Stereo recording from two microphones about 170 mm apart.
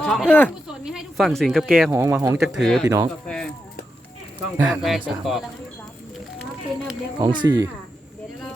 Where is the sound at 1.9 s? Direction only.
15° right (ahead or behind).